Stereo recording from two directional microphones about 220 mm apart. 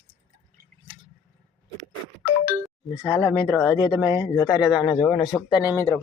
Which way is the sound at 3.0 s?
10° left (ahead or behind).